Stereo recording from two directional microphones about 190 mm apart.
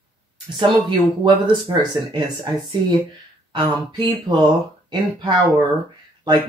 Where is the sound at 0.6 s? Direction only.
25° right (ahead or behind).